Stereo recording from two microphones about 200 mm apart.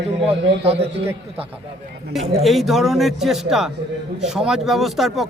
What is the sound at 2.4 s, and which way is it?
Speech, centre (ahead or behind).